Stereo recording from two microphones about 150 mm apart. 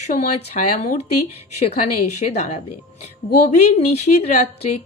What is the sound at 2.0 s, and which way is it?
A woman's voice, 50° left (ahead or behind).